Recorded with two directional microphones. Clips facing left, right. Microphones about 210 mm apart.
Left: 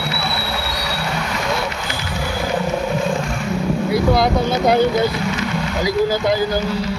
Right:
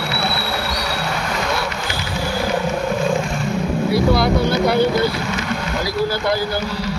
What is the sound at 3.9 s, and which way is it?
Vehicle, 20° left (ahead or behind).